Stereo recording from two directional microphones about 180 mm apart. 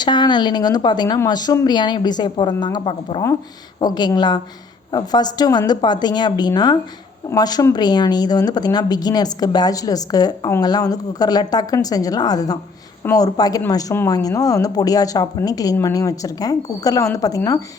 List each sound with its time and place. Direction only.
0.0 s speech: 25° left (ahead or behind)